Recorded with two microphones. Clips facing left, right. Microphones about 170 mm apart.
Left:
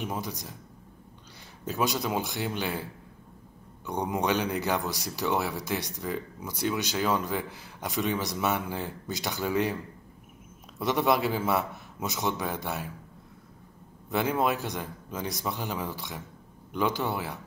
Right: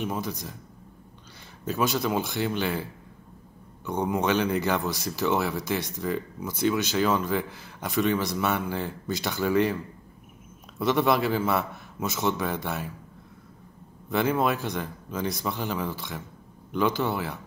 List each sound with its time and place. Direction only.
0.0 s speech: 15° left (ahead or behind)
1.7 s speech: 15° left (ahead or behind)
4.1 s speech: 15° left (ahead or behind)
10.8 s speech: 15° left (ahead or behind)
14.1 s speech: 15° left (ahead or behind)